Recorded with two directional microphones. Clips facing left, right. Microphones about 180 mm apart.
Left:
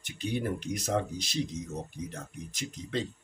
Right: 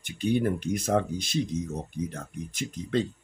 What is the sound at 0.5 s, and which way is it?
Speech, 50° right (ahead or behind).